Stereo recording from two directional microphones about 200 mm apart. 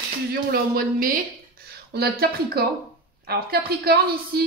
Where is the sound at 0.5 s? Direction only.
45° right (ahead or behind).